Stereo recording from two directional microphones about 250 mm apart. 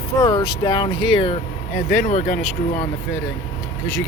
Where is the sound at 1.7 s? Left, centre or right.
Left.